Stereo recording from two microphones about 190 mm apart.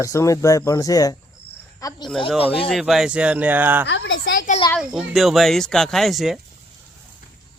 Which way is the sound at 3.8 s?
75° left (ahead or behind).